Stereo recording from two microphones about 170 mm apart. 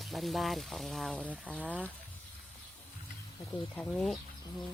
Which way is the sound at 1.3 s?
10° right (ahead or behind).